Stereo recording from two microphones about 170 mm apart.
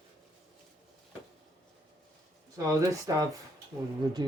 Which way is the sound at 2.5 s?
20° right (ahead or behind).